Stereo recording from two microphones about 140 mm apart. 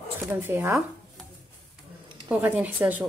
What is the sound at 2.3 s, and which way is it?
Speech, 10° right (ahead or behind).